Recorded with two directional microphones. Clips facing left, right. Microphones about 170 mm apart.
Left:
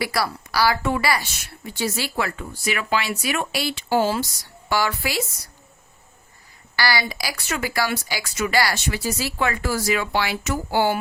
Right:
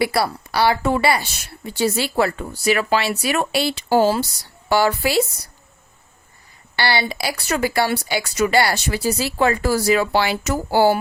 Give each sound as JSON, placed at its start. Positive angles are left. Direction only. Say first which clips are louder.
{"t": 0.0, "sound": "a woman's voice", "louder": "right 5 dB", "side_deg": -25}
{"t": 6.7, "sound": "a woman's voice", "louder": "right 3 dB", "side_deg": -25}